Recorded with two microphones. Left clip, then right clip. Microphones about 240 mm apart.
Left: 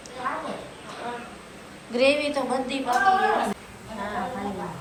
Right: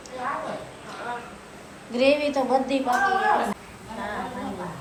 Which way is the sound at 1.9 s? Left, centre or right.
Centre.